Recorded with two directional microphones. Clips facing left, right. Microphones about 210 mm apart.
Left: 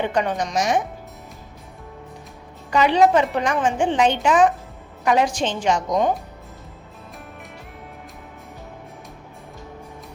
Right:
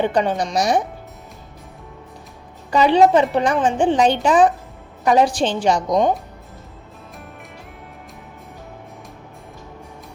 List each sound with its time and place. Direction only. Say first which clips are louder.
0.0 s speech: right 3 dB; 35° right (ahead or behind)
2.6 s speech: right 3 dB; 30° right (ahead or behind)